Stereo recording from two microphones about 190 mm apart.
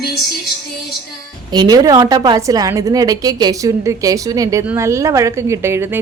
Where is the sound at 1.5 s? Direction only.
20° right (ahead or behind).